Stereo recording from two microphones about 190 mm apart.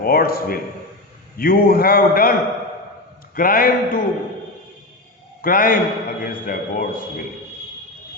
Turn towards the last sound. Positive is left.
turn(degrees=50)  # may be behind; listen again after turning